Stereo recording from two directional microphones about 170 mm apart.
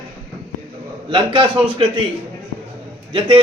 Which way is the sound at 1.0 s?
30° right (ahead or behind).